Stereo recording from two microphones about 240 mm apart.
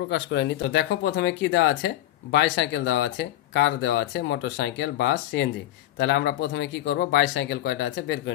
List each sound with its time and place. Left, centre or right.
0.1 s speech: left